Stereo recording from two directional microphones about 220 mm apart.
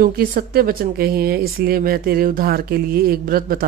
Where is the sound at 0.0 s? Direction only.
40° right (ahead or behind).